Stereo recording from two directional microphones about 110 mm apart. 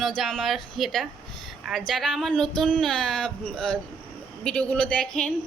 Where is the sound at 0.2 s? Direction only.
Centre (ahead or behind).